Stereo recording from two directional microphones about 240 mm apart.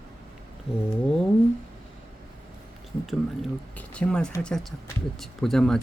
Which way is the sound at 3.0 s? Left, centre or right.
Centre.